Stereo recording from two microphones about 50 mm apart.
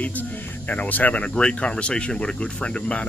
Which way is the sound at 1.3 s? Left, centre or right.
Centre.